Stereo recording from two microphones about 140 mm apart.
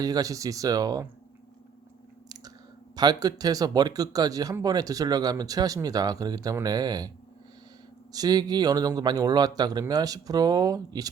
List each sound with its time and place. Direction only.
0.0 s speech: 25° right (ahead or behind)
2.9 s speech: 30° right (ahead or behind)
8.1 s speech: 30° right (ahead or behind)